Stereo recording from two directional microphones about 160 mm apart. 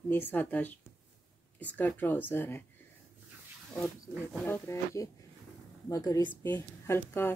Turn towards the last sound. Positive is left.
turn(degrees=15)  # may be behind; listen again after turning